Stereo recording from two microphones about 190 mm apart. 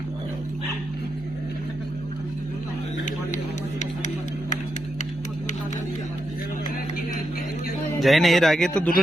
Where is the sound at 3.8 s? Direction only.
40° left (ahead or behind).